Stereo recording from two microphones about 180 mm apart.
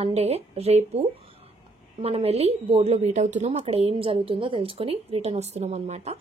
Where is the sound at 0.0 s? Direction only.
35° right (ahead or behind).